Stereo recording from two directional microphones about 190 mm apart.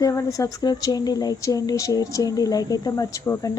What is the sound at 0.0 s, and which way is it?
Speech, 15° left (ahead or behind).